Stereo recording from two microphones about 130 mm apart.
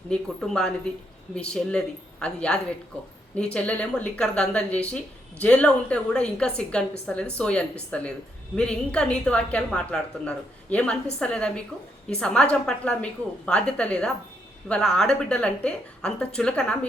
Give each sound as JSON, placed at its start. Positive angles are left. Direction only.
{"t": 0.1, "sound": "a woman's voice", "side_deg": 5}